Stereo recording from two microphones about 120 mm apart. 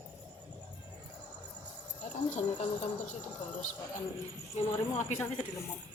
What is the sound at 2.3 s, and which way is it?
Speech, 75° left (ahead or behind).